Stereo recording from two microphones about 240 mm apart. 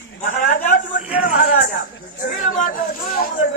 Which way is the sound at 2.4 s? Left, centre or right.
Left.